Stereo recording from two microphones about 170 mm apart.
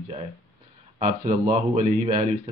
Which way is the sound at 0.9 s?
45° right (ahead or behind).